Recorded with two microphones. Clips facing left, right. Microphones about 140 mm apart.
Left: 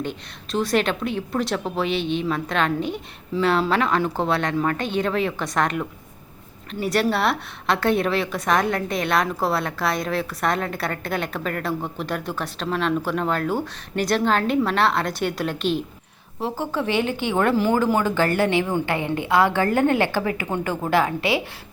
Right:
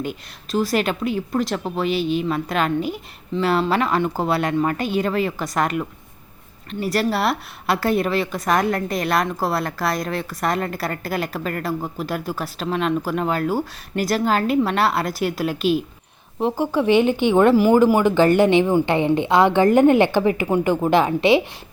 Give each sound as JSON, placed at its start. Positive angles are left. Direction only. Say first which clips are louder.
{"t": 0.0, "sound": "a woman's voice", "louder": "right 1 dB", "side_deg": -5}